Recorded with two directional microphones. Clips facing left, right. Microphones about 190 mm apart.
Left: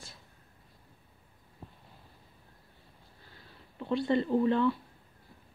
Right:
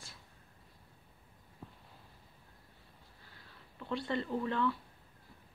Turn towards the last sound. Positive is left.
turn(degrees=25)  # may be behind; listen again after turning